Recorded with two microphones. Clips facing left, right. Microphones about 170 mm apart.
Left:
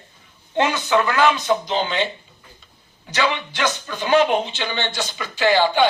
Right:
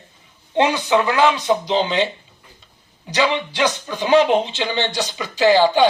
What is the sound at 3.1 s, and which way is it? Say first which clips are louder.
Speech: right 3 dB; 35° right (ahead or behind).